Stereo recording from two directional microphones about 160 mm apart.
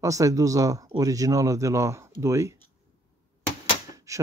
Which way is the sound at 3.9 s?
20° right (ahead or behind).